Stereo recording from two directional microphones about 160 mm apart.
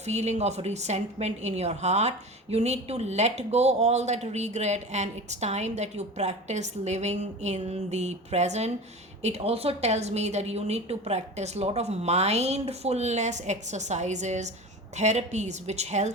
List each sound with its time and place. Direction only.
0.0 s a woman's voice: 45° right (ahead or behind)